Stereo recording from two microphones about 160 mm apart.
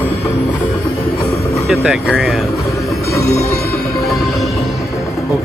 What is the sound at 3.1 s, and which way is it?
Music, 20° left (ahead or behind).